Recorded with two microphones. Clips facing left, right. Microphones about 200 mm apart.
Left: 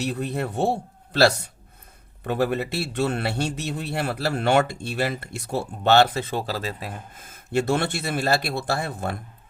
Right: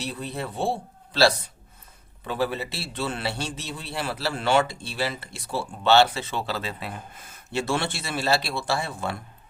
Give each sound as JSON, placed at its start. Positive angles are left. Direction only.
{"t": 0.2, "sound": "a man's voice", "side_deg": 60}